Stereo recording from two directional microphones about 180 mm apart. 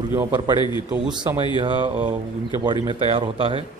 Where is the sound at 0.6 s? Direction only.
25° left (ahead or behind).